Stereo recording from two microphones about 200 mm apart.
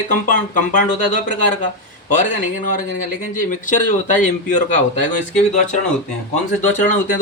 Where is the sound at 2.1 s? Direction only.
40° left (ahead or behind).